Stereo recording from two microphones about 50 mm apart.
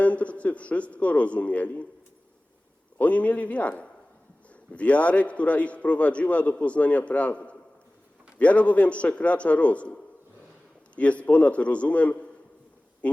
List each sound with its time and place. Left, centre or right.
0.0 s a man's voice: left
3.0 s a man's voice: left